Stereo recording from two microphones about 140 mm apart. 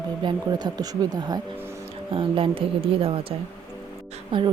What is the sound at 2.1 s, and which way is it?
Speech, 40° right (ahead or behind).